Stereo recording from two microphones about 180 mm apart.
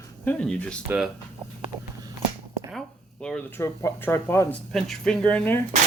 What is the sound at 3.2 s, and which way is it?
Speech, 5° left (ahead or behind).